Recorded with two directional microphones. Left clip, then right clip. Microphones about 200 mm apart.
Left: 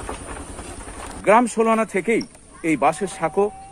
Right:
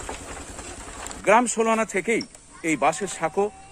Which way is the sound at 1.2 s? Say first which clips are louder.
Left 3 dB; 10° right (ahead or behind).